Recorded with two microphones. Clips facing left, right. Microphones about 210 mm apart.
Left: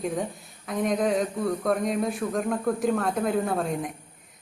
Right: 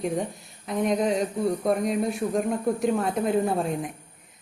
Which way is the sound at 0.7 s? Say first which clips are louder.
Right 1 dB; centre (ahead or behind).